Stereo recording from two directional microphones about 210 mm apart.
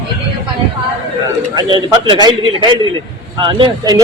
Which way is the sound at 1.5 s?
20° right (ahead or behind).